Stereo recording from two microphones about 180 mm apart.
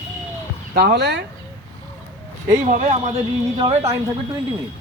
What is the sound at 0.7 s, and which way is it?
Speech, 65° right (ahead or behind).